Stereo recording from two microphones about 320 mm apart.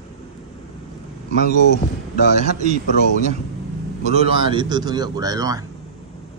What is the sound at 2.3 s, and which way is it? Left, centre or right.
Speech, right.